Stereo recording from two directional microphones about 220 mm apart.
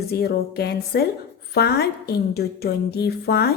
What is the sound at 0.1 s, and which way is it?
Speech, 45° left (ahead or behind).